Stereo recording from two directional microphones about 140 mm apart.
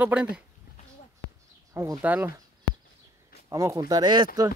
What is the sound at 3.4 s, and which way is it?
Speech, 20° right (ahead or behind).